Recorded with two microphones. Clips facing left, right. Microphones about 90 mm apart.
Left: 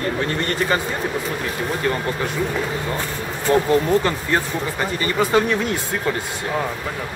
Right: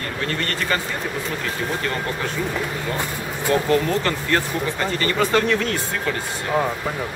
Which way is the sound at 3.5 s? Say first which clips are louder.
Left 3 dB; 20° left (ahead or behind).